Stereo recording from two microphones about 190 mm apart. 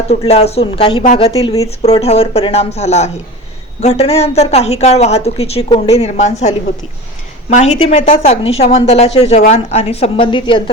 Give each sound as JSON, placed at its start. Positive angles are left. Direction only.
{"t": 0.1, "sound": "a woman's voice", "side_deg": 35}
{"t": 7.5, "sound": "a woman's voice", "side_deg": 35}